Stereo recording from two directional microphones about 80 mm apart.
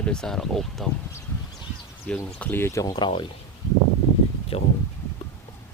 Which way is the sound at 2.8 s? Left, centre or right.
Left.